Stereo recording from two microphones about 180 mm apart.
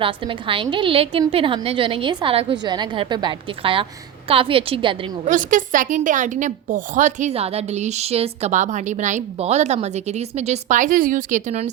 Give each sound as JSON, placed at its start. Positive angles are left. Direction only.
{"t": 0.0, "sound": "a woman's voice", "side_deg": -30}
{"t": 5.2, "sound": "a woman's voice", "side_deg": -45}